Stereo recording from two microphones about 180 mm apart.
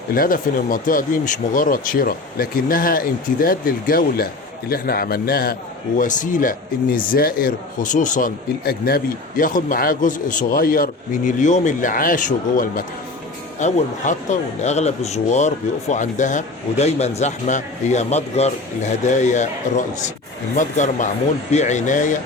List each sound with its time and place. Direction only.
0.1 s a man's voice: 50° left (ahead or behind)